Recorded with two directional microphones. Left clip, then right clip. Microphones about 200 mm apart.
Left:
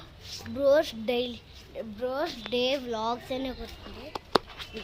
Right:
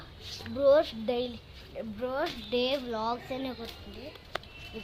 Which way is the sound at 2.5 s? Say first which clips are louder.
Left 2 dB; 20° left (ahead or behind).